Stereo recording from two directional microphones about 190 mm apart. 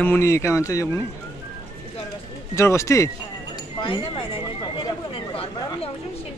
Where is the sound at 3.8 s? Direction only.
25° left (ahead or behind).